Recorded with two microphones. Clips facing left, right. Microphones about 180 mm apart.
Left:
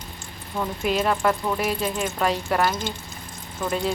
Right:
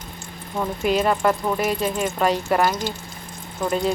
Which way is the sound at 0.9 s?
Centre (ahead or behind).